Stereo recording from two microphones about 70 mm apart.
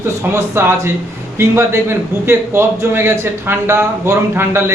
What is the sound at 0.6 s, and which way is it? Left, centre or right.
A man's voice, right.